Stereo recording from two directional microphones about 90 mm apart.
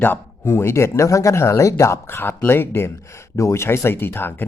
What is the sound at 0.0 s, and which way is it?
Speech, 25° left (ahead or behind).